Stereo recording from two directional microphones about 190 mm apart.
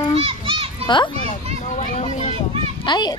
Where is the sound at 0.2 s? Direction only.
30° right (ahead or behind).